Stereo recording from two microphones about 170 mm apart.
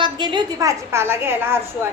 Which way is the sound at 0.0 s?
25° right (ahead or behind).